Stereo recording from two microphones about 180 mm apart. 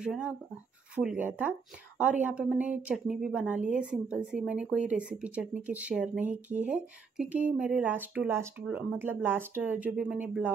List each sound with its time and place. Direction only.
0.0 s speech: 5° right (ahead or behind)